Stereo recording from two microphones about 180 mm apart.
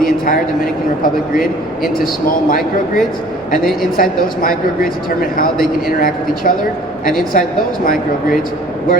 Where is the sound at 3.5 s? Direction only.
55° left (ahead or behind).